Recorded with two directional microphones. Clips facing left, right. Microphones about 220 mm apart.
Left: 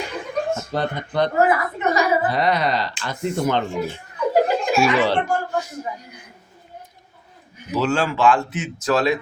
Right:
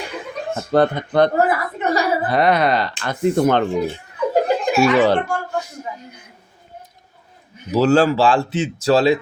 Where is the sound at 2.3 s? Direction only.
55° right (ahead or behind).